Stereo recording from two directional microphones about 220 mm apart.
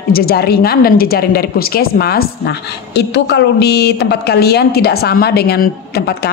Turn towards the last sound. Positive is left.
turn(degrees=45)  # may be behind; listen again after turning